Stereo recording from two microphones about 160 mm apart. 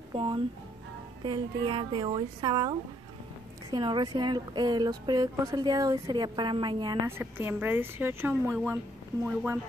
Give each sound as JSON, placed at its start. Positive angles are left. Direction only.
{"t": 0.1, "sound": "speech", "side_deg": -30}
{"t": 3.7, "sound": "speech", "side_deg": -25}
{"t": 7.1, "sound": "a woman's voice", "side_deg": -15}